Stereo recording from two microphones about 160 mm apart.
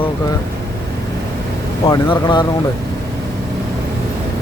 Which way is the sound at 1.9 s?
25° left (ahead or behind).